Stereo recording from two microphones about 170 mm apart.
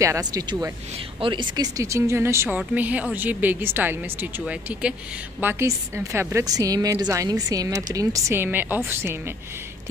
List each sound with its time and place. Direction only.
0.0 s a woman's voice: 20° right (ahead or behind)